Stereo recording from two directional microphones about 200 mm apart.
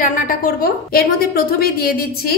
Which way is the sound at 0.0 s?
45° left (ahead or behind).